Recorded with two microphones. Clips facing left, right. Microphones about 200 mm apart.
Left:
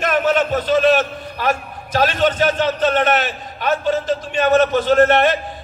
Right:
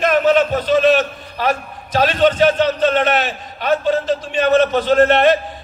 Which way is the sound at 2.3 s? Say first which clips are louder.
Right 3 dB; 45° left (ahead or behind).